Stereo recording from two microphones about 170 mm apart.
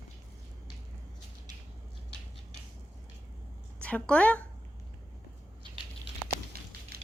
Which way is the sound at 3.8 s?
5° left (ahead or behind).